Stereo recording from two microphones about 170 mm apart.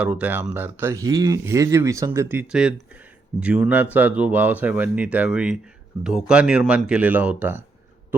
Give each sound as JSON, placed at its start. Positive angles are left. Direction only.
{"t": 0.0, "sound": "speech", "side_deg": -5}